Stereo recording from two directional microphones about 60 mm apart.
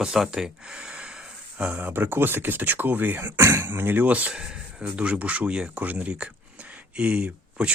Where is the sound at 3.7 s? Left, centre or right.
Right.